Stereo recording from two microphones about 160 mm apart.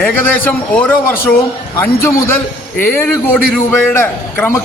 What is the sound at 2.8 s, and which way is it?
A man's voice, 10° left (ahead or behind).